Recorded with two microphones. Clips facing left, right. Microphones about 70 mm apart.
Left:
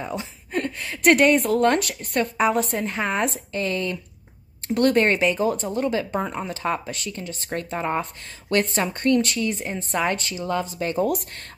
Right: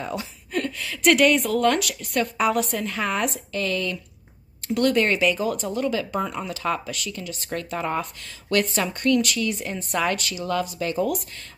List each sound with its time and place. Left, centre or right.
0.1 s a sound: left
0.8 s speech: left
4.7 s speech: left